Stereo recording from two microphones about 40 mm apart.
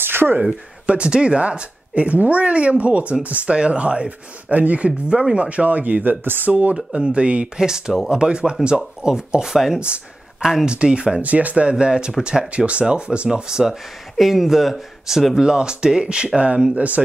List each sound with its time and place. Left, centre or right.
0.0 s a sound: right
0.8 s speech: right
4.5 s speech: right
6.2 s speech: right
6.5 s speech: right
7.5 s speech: centre
9.8 s speech: right
11.2 s speech: right
11.8 s speech: right
13.3 s speech: centre
14.1 s speech: centre
15.4 s speech: right
16.7 s speech: right